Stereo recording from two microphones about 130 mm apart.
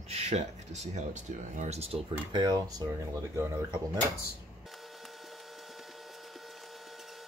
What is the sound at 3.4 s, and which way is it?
Speech, 20° right (ahead or behind).